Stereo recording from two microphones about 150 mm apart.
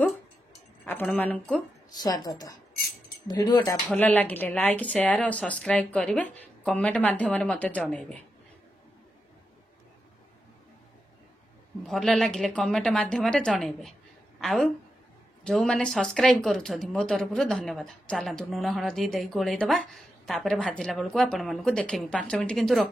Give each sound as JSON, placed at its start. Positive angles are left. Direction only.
{"t": 0.8, "sound": "speech", "side_deg": 10}
{"t": 2.0, "sound": "a woman's voice", "side_deg": 25}
{"t": 3.9, "sound": "a woman's voice", "side_deg": 10}
{"t": 11.8, "sound": "a woman's voice", "side_deg": 0}